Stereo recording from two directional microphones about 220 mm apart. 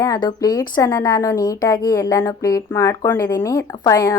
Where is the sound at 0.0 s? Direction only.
15° left (ahead or behind).